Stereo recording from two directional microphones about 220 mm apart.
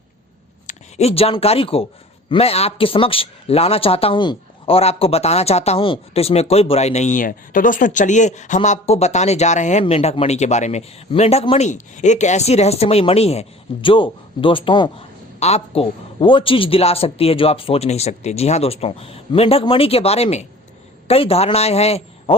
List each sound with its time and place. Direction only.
0.7 s speech: 30° left (ahead or behind)